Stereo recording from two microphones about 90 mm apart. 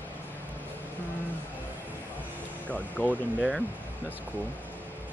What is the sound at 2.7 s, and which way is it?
Speech, 15° left (ahead or behind).